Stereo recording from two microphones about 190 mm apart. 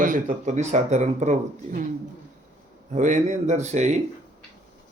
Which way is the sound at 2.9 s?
40° right (ahead or behind).